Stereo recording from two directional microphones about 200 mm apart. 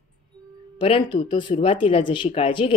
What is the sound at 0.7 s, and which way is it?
Speech, 25° left (ahead or behind).